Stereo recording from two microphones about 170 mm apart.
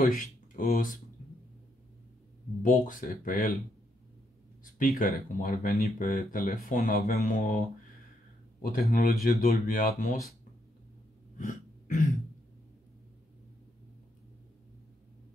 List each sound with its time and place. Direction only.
0.0 s speech: 50° left (ahead or behind)
2.6 s speech: 50° left (ahead or behind)
4.7 s speech: 55° left (ahead or behind)
8.6 s speech: 55° left (ahead or behind)
11.3 s a sound: 50° left (ahead or behind)